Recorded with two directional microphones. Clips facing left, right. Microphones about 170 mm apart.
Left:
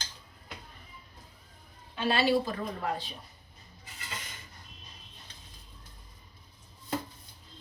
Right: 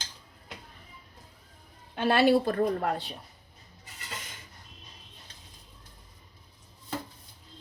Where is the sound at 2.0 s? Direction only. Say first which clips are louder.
Right 4 dB; 55° right (ahead or behind).